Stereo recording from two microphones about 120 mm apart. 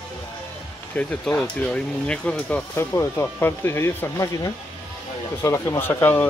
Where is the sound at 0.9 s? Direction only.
10° left (ahead or behind).